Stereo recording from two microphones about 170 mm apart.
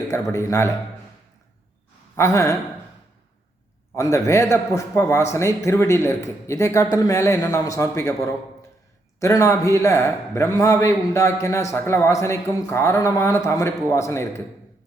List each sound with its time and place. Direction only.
0.1 s a man's voice: 15° left (ahead or behind)
2.1 s a man's voice: 20° left (ahead or behind)
3.9 s a man's voice: 15° left (ahead or behind)